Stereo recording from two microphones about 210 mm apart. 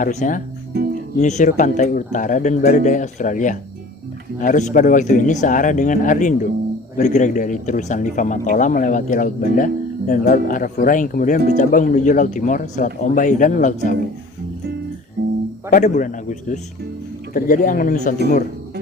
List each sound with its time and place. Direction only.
0.0 s speech: 35° left (ahead or behind)
15.7 s speech: 40° left (ahead or behind)